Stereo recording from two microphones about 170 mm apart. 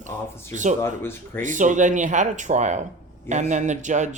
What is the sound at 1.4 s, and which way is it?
A man's voice, 50° right (ahead or behind).